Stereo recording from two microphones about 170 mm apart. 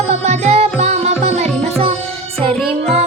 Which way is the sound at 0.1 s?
40° right (ahead or behind).